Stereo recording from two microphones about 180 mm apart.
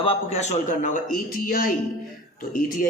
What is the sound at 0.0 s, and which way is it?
A man's voice, 35° left (ahead or behind).